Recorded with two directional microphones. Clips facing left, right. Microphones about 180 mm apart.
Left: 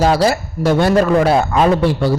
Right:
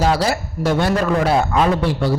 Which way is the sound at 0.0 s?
40° left (ahead or behind).